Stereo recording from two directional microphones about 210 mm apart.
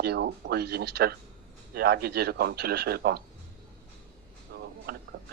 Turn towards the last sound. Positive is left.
turn(degrees=-50)  # may be behind; listen again after turning